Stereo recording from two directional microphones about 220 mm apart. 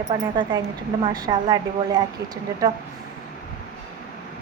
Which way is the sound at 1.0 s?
20° right (ahead or behind).